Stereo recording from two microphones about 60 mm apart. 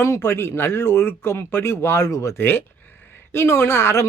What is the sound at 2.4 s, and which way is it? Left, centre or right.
Speech, left.